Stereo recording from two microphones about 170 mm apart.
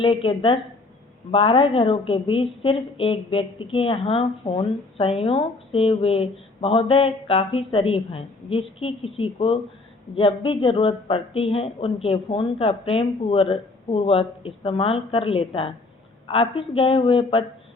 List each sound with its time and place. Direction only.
0.0 s a woman's voice: 30° left (ahead or behind)